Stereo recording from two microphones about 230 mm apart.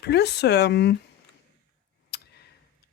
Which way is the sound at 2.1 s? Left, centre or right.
Left.